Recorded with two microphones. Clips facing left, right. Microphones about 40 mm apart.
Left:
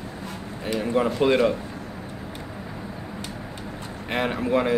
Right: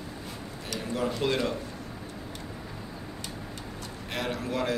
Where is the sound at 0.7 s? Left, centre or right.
Left.